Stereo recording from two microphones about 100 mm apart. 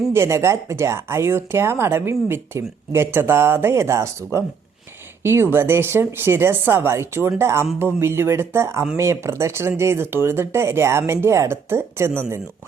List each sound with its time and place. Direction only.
0.1 s speech: 25° right (ahead or behind)